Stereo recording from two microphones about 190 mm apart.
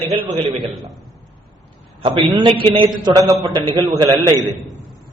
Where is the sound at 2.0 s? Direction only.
25° right (ahead or behind).